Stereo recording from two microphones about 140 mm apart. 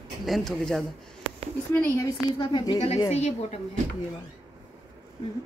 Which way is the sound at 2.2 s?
35° left (ahead or behind).